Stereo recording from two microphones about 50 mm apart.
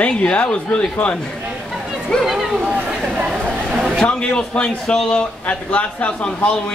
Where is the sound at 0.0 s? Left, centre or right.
Left.